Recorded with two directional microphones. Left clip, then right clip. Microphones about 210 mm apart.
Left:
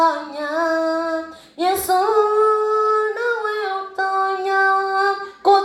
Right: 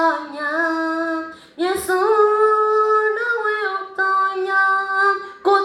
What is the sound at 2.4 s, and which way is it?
Music, 45° left (ahead or behind).